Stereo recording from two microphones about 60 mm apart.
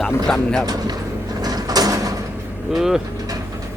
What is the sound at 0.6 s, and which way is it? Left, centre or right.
Speech, right.